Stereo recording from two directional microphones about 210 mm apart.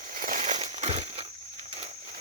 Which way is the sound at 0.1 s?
40° right (ahead or behind).